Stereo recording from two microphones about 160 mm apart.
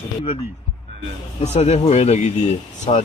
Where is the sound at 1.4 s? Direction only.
40° left (ahead or behind).